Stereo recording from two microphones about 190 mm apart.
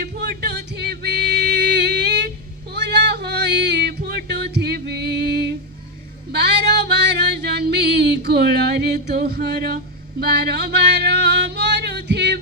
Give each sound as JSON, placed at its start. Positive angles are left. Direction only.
{"t": 0.0, "sound": "music", "side_deg": -60}
{"t": 6.3, "sound": "female singing", "side_deg": -65}